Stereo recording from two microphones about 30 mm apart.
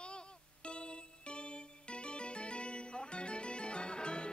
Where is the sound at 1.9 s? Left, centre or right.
Left.